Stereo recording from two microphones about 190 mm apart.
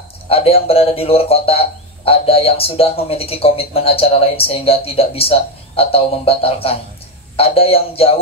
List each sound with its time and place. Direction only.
0.3 s a man's voice: 30° left (ahead or behind)